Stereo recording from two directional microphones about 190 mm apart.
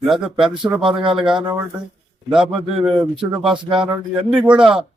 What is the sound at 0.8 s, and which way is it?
Speech, 25° right (ahead or behind).